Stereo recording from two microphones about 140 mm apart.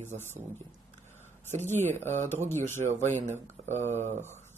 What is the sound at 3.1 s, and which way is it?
Speech, 55° right (ahead or behind).